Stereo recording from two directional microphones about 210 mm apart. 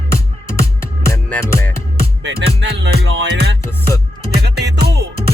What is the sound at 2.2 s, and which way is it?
Music, 55° right (ahead or behind).